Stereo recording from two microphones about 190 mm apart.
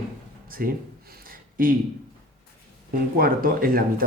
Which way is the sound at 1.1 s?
50° right (ahead or behind).